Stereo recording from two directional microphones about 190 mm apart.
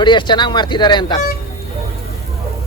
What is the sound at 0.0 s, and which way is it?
Speech, 25° left (ahead or behind).